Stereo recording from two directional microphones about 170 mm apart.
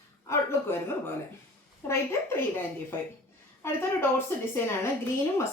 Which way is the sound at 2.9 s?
10° left (ahead or behind).